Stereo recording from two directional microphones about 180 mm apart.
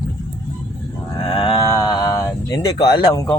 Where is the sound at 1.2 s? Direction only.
30° left (ahead or behind).